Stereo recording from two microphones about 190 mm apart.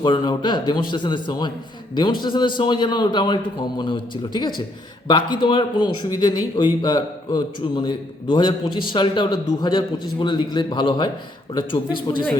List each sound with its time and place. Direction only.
0.0 s a man's voice: 25° left (ahead or behind)